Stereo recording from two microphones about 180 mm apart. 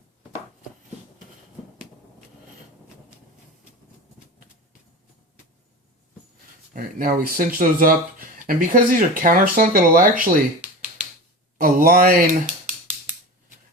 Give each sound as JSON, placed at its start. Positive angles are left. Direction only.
{"t": 6.7, "sound": "speech", "side_deg": -50}
{"t": 11.5, "sound": "speech", "side_deg": -50}